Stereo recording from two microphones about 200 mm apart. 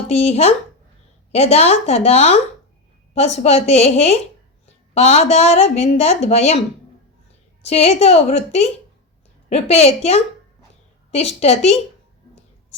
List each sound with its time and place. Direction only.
0.1 s a woman's voice: 30° left (ahead or behind)
7.6 s a woman's voice: 30° left (ahead or behind)